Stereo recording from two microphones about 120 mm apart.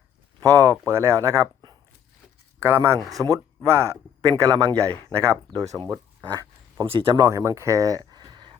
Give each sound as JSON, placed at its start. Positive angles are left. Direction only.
{"t": 0.4, "sound": "speech", "side_deg": -25}
{"t": 2.6, "sound": "speech", "side_deg": -20}
{"t": 5.8, "sound": "a sound", "side_deg": -35}
{"t": 6.8, "sound": "speech", "side_deg": -45}
{"t": 7.3, "sound": "speech", "side_deg": -25}